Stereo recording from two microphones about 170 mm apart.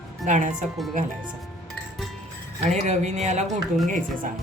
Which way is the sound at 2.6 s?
45° right (ahead or behind).